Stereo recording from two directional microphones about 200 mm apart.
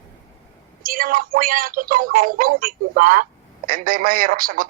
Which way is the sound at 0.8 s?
45° right (ahead or behind).